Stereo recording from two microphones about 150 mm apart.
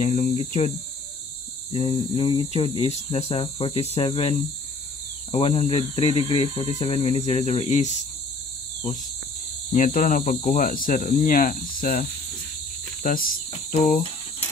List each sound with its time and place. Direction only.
0.0 s speech: 55° left (ahead or behind)
1.7 s speech: 40° left (ahead or behind)
9.7 s speech: 60° left (ahead or behind)
13.0 s cricket: 70° left (ahead or behind)
13.7 s speech: 55° left (ahead or behind)